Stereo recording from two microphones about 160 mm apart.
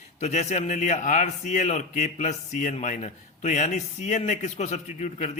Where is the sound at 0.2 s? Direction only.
45° left (ahead or behind).